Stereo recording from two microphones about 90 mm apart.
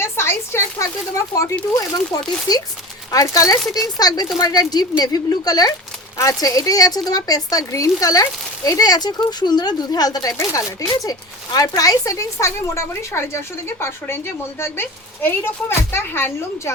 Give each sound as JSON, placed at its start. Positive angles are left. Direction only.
{"t": 0.0, "sound": "speech", "side_deg": 30}
{"t": 10.3, "sound": "a woman's voice", "side_deg": 35}